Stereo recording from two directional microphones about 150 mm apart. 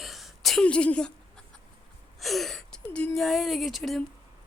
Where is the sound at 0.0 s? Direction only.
Centre (ahead or behind).